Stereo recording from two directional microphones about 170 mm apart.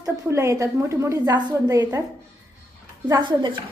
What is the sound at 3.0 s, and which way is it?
Speech, 25° right (ahead or behind).